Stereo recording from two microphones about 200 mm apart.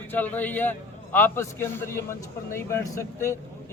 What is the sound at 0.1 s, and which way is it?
A man's voice, 10° left (ahead or behind).